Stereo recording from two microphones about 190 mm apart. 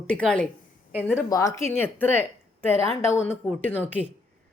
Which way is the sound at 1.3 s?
15° left (ahead or behind).